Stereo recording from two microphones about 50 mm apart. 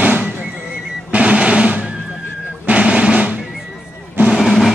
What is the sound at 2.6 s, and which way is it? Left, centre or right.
Music, right.